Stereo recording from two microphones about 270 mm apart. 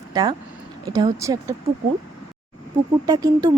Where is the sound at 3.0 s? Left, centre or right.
Centre.